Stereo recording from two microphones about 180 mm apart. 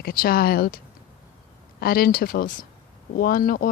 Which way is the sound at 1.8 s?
55° left (ahead or behind).